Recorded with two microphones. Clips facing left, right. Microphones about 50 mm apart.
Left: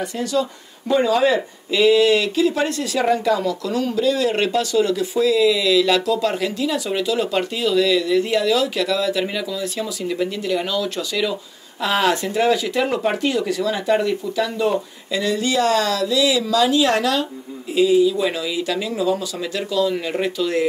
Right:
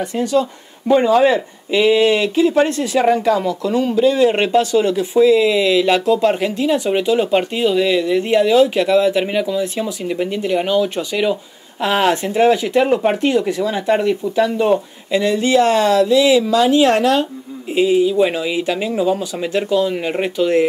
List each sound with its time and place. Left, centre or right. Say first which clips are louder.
0.0 s speech: right 4 dB; right
13.2 s speech: right 4 dB; right